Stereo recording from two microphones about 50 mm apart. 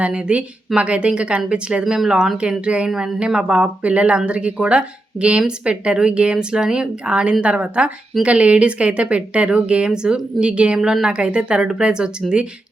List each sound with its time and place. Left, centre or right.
0.0 s speech: right
1.8 s speech: centre
2.4 s speech: right
10.8 s a woman's voice: centre
11.0 s speech: centre